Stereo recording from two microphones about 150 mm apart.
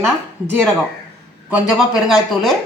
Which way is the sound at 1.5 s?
5° right (ahead or behind).